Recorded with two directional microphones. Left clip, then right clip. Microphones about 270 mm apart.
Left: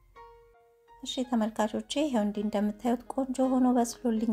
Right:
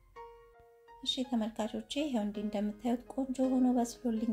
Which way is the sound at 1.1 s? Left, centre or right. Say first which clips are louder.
Left 8 dB; left.